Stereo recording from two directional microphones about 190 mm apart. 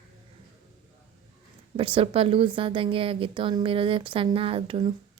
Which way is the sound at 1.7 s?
30° right (ahead or behind).